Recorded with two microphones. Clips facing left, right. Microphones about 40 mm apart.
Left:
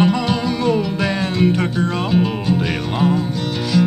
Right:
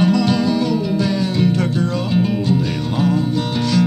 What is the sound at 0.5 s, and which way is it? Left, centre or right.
Music, left.